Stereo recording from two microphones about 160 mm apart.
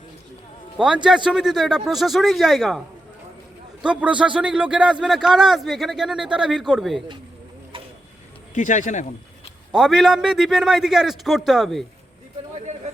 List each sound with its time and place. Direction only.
1.0 s speech: 5° right (ahead or behind)
3.8 s a man's voice: 5° right (ahead or behind)
8.5 s speech: 50° left (ahead or behind)
9.7 s speech: centre (ahead or behind)